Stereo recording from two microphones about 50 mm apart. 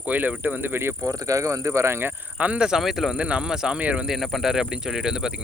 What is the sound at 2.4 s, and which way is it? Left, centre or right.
Speech, right.